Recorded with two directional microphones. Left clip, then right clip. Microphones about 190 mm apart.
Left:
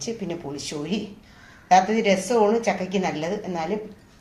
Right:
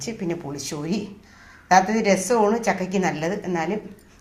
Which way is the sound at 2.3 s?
15° right (ahead or behind).